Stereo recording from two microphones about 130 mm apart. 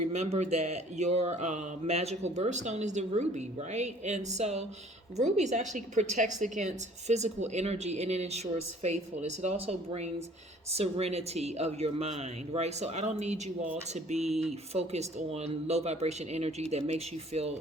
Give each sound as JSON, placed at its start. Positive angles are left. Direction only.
{"t": 0.0, "sound": "speech", "side_deg": -60}